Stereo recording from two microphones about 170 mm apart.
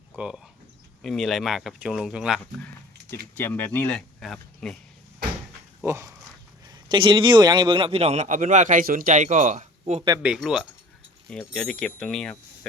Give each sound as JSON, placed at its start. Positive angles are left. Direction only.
{"t": 0.2, "sound": "speech", "side_deg": -5}
{"t": 3.3, "sound": "speech", "side_deg": 10}
{"t": 5.8, "sound": "speech", "side_deg": -20}
{"t": 6.7, "sound": "a man's voice", "side_deg": -30}
{"t": 10.2, "sound": "speech", "side_deg": -5}